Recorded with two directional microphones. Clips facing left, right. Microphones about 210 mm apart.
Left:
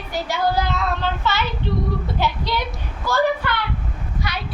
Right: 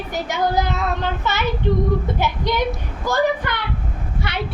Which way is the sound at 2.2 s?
20° right (ahead or behind).